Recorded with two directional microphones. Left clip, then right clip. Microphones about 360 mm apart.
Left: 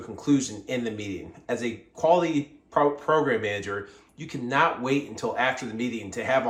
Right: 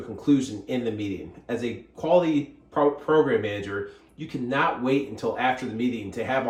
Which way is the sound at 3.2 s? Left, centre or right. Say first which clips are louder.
Right 1 dB; centre.